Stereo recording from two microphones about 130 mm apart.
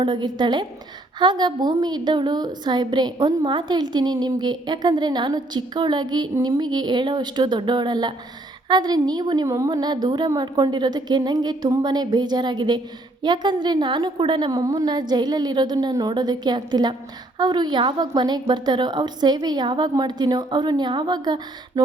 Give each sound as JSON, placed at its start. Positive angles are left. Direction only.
{"t": 0.0, "sound": "a woman's voice", "side_deg": -35}